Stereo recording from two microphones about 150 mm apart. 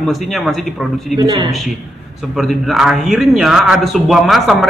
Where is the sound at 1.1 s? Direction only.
25° right (ahead or behind).